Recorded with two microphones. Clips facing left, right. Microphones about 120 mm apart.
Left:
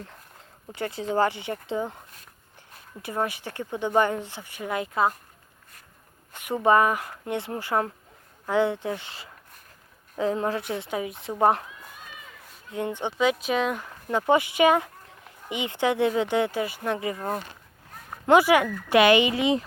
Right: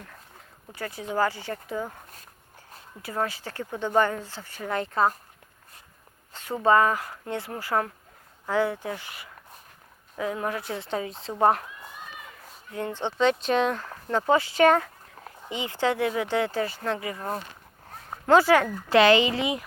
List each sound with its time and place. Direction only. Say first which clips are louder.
0.7 s speech: left 4 dB; 25° left (ahead or behind)
3.0 s speech: left 1 dB; 20° left (ahead or behind)
6.3 s speech: left 1 dB; 15° left (ahead or behind)
12.7 s speech: left 1 dB; 15° left (ahead or behind)